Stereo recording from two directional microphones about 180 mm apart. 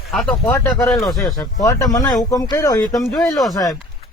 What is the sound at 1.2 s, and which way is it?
Speech, 20° left (ahead or behind).